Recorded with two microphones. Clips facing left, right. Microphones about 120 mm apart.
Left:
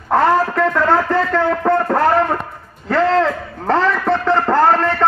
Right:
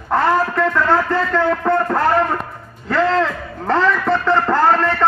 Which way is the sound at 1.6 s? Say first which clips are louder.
Left 2 dB; 35° left (ahead or behind).